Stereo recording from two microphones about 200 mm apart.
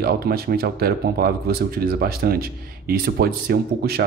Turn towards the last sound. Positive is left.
turn(degrees=-50)  # may be behind; listen again after turning